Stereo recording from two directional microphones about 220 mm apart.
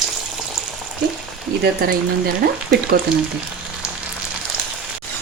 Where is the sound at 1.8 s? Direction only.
45° right (ahead or behind).